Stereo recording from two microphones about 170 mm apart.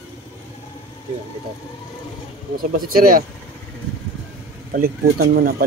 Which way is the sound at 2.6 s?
60° right (ahead or behind).